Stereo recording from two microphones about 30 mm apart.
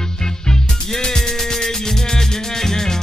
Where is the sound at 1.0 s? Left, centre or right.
Centre.